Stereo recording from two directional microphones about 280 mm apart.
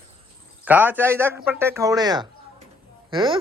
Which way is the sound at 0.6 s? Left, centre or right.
Centre.